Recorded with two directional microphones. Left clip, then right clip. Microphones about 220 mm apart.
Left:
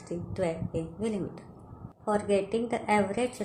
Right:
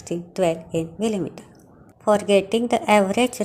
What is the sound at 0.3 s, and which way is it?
A woman's voice, 35° right (ahead or behind).